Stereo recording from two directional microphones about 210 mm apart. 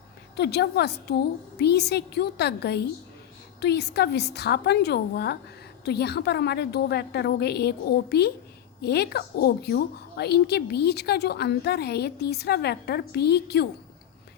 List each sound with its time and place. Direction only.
0.3 s a woman's voice: 50° left (ahead or behind)